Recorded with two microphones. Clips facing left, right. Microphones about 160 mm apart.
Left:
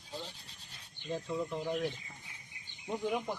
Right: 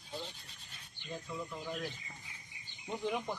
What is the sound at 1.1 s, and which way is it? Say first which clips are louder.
Speech: left 6 dB; 25° left (ahead or behind).